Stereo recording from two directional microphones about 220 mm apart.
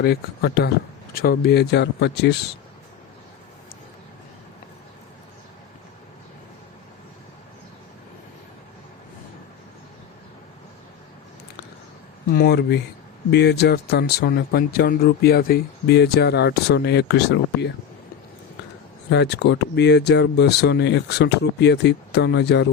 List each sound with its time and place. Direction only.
0.0 s speech: 45° left (ahead or behind)
12.3 s speech: 45° left (ahead or behind)
19.1 s speech: 50° left (ahead or behind)